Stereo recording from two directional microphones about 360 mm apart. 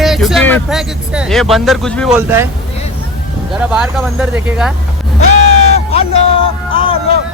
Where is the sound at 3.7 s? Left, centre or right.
Centre.